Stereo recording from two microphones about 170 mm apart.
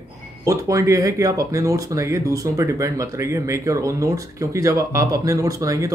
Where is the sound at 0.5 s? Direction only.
20° right (ahead or behind).